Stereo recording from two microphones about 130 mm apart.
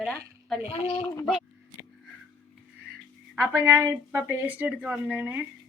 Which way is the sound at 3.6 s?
15° right (ahead or behind).